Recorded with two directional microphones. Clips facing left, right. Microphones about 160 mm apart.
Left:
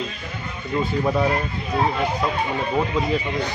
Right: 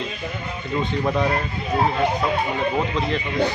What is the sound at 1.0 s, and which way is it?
Speech, 5° left (ahead or behind).